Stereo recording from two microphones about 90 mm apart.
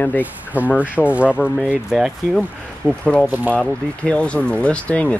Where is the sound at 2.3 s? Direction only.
10° left (ahead or behind).